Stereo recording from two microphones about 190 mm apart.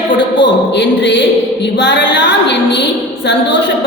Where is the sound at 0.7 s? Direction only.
65° left (ahead or behind).